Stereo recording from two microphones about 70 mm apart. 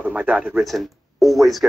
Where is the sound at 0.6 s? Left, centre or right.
Centre.